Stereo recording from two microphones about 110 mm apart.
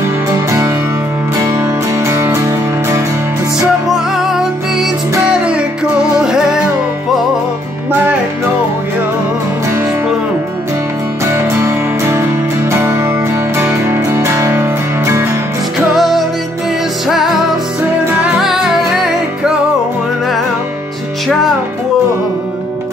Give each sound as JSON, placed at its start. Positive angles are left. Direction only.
{"t": 0.3, "sound": "music", "side_deg": -30}
{"t": 3.5, "sound": "music", "side_deg": -5}
{"t": 11.3, "sound": "music", "side_deg": -25}
{"t": 15.9, "sound": "music", "side_deg": 0}
{"t": 18.2, "sound": "music", "side_deg": -5}
{"t": 21.3, "sound": "music", "side_deg": 0}